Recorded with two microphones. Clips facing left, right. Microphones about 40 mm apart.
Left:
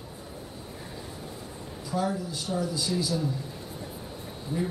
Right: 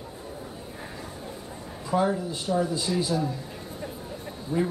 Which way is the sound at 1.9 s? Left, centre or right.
Right.